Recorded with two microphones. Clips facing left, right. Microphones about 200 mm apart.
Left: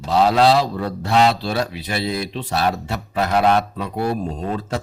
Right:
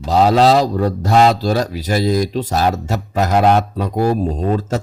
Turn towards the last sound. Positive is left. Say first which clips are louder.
# right 6 dB
turn(degrees=-45)  # may be behind; listen again after turning